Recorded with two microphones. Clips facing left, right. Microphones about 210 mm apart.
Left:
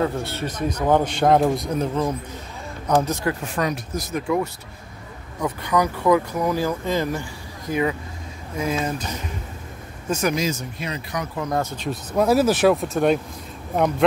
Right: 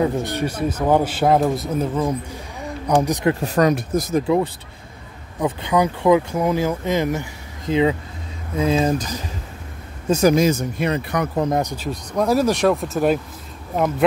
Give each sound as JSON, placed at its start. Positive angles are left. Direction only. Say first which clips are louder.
{"t": 0.0, "sound": "a man's voice", "louder": "right 4 dB", "side_deg": -15}
{"t": 3.3, "sound": "speech", "louder": "right 7 dB", "side_deg": -40}
{"t": 4.1, "sound": "speech", "louder": "right 3 dB", "side_deg": -30}
{"t": 10.0, "sound": "speech", "louder": "right 7 dB", "side_deg": -25}
{"t": 10.3, "sound": "speech", "louder": "right 7 dB", "side_deg": -50}
{"t": 11.7, "sound": "speech", "louder": "even", "side_deg": -5}